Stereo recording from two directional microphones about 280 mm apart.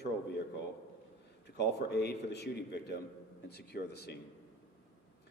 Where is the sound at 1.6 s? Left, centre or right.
Left.